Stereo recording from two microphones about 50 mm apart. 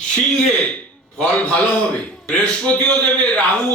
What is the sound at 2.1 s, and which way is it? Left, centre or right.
A man's voice, left.